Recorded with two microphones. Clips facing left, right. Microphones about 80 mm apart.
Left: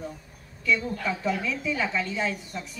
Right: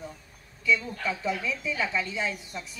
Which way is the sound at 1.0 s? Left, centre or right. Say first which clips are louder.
Left 2 dB; centre.